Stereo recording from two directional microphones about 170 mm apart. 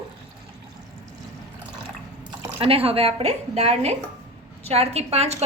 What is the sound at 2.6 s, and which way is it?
A woman's voice, 35° right (ahead or behind).